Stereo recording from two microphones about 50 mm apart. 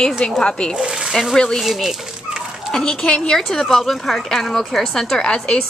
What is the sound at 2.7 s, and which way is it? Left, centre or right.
Speech, centre.